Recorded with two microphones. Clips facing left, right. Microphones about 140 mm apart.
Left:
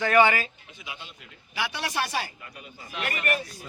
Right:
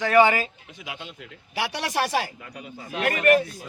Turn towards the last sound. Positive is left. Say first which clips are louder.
# right 10 dB
turn(degrees=-50)  # may be behind; listen again after turning